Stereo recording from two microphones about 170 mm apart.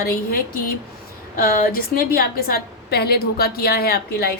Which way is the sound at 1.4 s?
60° left (ahead or behind).